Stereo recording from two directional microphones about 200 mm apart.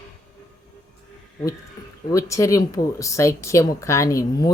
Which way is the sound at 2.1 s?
15° left (ahead or behind).